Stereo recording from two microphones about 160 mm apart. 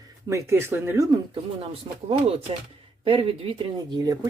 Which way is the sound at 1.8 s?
35° right (ahead or behind).